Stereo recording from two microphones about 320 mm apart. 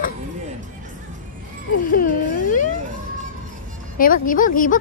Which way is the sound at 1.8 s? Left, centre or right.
Left.